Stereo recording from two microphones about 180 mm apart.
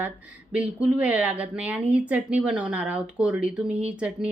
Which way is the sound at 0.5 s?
5° right (ahead or behind).